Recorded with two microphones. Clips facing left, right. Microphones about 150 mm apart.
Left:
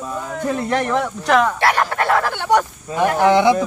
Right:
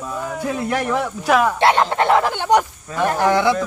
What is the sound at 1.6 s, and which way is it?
Speech, 20° right (ahead or behind).